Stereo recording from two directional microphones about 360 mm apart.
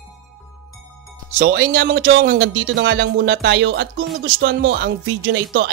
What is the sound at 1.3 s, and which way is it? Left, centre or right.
Speech, right.